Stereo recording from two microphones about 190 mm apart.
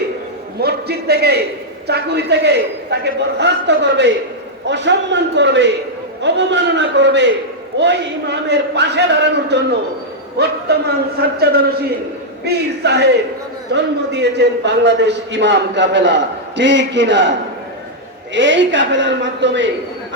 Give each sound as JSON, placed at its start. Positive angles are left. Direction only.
{"t": 0.6, "sound": "a man's voice", "side_deg": -55}
{"t": 18.3, "sound": "a man's voice", "side_deg": -75}